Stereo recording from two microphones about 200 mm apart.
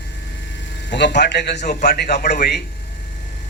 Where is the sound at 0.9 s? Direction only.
60° left (ahead or behind).